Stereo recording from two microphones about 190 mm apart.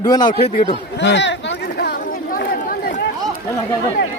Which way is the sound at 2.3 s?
50° left (ahead or behind).